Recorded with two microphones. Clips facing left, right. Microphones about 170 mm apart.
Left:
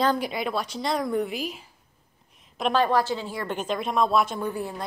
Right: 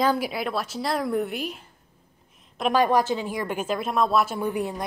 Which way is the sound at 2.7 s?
15° right (ahead or behind).